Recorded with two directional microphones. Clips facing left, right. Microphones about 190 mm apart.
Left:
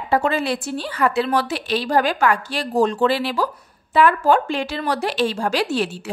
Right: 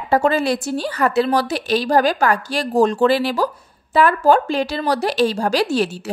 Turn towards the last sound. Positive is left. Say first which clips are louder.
# right 3 dB
turn(degrees=-40)  # may be behind; listen again after turning